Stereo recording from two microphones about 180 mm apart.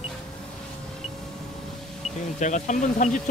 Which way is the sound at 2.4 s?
45° left (ahead or behind).